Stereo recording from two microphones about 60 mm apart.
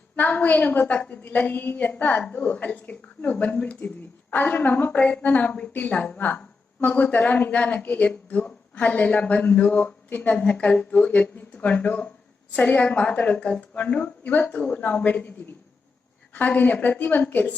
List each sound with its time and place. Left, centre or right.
0.2 s speech: left
1.2 s speech: left
16.3 s speech: left